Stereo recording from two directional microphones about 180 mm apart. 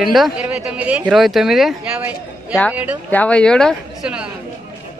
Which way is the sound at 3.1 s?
5° left (ahead or behind).